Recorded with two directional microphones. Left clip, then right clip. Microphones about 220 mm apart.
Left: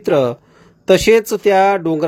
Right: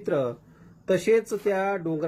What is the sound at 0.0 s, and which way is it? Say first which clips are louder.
Speech: left 12 dB; 40° left (ahead or behind).